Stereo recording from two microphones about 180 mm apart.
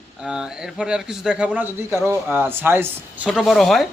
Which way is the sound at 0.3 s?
5° right (ahead or behind).